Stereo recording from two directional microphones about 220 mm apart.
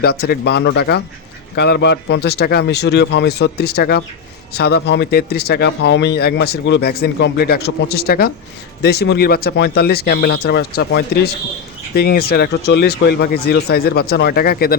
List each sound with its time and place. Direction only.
0.0 s speech: 45° left (ahead or behind)